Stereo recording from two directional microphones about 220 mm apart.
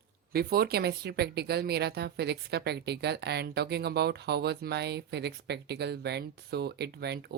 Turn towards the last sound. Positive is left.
turn(degrees=-50)  # may be behind; listen again after turning